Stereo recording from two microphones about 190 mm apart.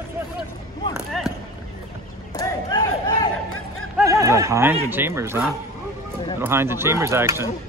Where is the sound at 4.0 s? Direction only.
15° right (ahead or behind).